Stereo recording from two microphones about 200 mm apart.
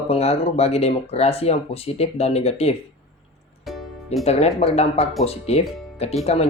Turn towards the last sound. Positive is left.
turn(degrees=30)  # may be behind; listen again after turning